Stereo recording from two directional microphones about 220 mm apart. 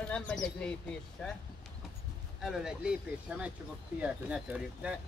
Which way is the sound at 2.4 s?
Centre (ahead or behind).